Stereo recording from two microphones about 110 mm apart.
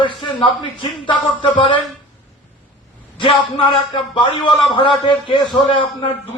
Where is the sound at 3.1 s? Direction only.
50° left (ahead or behind).